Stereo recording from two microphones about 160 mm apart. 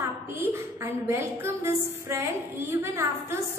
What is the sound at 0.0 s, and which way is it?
A woman's voice, 15° right (ahead or behind).